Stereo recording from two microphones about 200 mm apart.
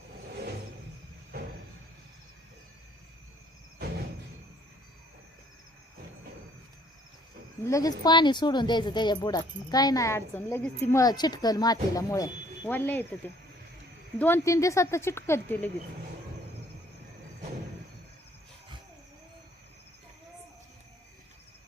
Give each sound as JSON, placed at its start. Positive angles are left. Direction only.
{"t": 7.6, "sound": "speech", "side_deg": 15}
{"t": 11.0, "sound": "speech", "side_deg": 20}